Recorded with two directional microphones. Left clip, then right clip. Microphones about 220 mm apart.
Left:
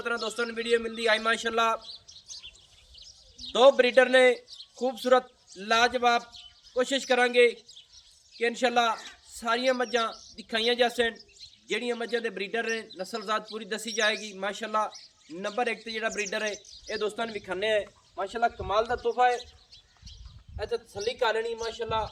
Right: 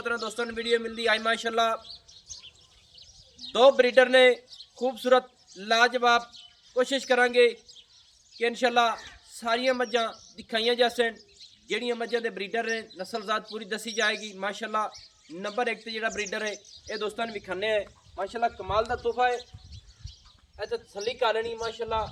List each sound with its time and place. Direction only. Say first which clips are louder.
0.0 s speech: even; centre (ahead or behind)
3.5 s speech: even; centre (ahead or behind)
20.6 s a man's voice: left 1 dB; 20° left (ahead or behind)